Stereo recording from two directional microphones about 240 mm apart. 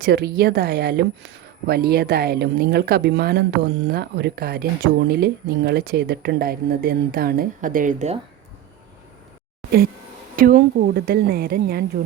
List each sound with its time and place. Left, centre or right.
0.0 s speech: right
10.3 s speech: right